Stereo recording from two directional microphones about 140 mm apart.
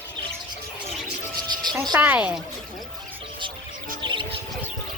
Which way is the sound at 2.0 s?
10° right (ahead or behind).